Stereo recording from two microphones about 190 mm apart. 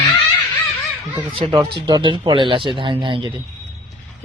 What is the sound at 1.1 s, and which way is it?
Speech, 25° right (ahead or behind).